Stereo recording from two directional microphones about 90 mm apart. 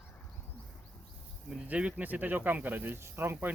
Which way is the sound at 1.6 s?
15° right (ahead or behind).